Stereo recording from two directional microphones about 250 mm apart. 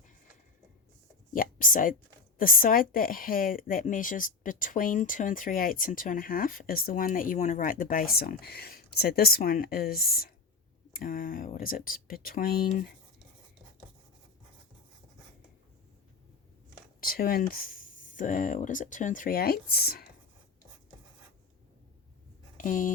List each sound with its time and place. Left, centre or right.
1.3 s speech: left
17.0 s speech: left
22.5 s speech: left